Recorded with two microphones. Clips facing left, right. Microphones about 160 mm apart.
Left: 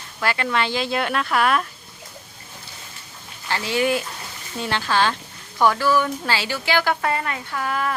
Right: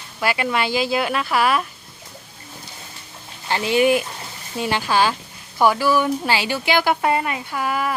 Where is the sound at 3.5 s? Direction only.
20° right (ahead or behind).